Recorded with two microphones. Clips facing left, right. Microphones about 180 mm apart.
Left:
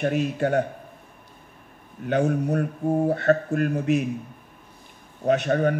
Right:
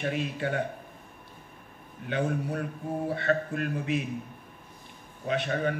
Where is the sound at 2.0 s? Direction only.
45° left (ahead or behind).